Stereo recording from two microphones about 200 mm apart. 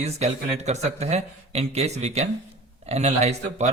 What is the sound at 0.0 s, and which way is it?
Speech, 35° right (ahead or behind).